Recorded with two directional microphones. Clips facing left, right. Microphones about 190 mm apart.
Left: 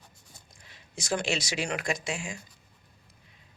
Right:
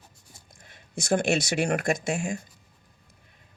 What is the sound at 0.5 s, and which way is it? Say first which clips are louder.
Speech: right 7 dB; 50° right (ahead or behind).